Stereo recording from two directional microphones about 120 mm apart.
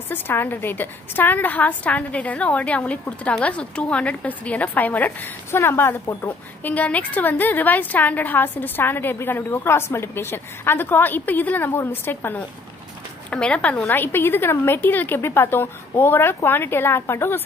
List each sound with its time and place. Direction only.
0.1 s a woman's voice: 15° left (ahead or behind)